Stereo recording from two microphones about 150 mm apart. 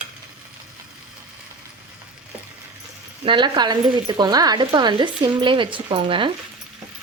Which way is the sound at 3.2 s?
30° right (ahead or behind).